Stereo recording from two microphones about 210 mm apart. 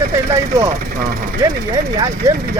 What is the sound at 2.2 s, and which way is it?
Speech, 15° right (ahead or behind).